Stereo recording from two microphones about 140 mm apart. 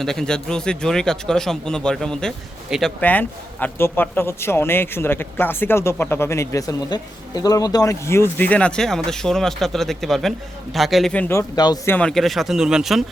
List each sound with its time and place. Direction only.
0.0 s speech: 5° left (ahead or behind)
3.0 s a man's voice: 10° left (ahead or behind); by 11.8 s 30° left (ahead or behind)
11.9 s speech: 10° left (ahead or behind)